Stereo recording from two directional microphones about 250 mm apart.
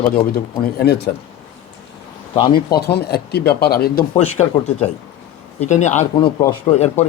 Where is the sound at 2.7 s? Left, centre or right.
Left.